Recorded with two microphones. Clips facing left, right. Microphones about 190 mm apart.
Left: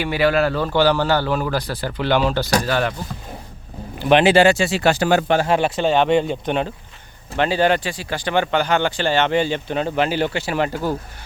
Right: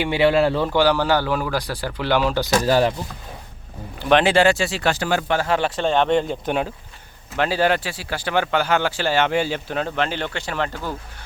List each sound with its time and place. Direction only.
0.0 s speech: 25° right (ahead or behind)
0.7 s speech: 10° right (ahead or behind)
2.6 s speech: 35° right (ahead or behind)
4.1 s speech: 5° left (ahead or behind)
4.9 s speech: 20° left (ahead or behind)